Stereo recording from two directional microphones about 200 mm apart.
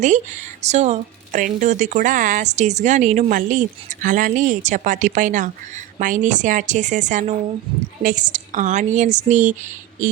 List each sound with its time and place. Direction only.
0.0 s speech: 35° right (ahead or behind)